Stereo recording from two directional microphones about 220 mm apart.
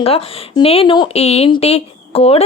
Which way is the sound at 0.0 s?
25° left (ahead or behind).